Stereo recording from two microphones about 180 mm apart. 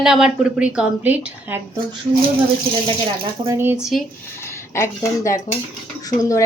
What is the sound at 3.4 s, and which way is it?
Speech, 15° right (ahead or behind).